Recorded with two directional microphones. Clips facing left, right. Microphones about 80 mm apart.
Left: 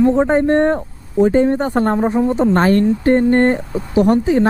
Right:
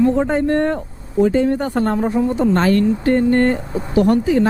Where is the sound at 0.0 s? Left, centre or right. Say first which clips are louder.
Left 3 dB; left.